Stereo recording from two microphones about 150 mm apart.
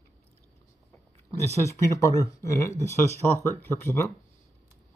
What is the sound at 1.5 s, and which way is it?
Speech, 20° left (ahead or behind).